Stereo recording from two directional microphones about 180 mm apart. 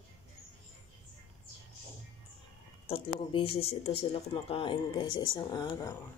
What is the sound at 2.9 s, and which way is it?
Speech, 30° left (ahead or behind).